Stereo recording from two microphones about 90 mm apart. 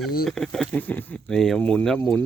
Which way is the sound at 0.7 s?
20° left (ahead or behind).